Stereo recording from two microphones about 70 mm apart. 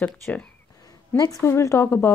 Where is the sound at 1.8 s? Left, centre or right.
Left.